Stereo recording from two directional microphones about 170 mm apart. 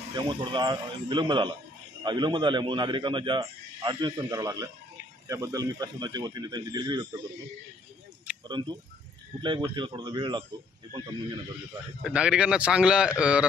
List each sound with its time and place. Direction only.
0.1 s a man's voice: 25° right (ahead or behind)
8.5 s a man's voice: 25° right (ahead or behind)
12.0 s a man's voice: 5° right (ahead or behind)